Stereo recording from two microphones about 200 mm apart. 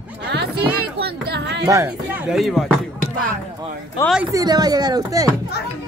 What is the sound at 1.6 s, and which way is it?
Speech, 15° right (ahead or behind).